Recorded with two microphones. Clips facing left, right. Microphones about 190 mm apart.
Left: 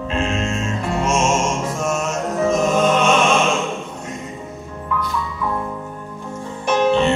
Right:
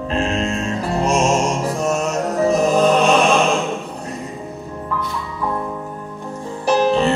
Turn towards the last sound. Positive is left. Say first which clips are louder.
# right 1 dB
turn(degrees=-35)  # may be behind; listen again after turning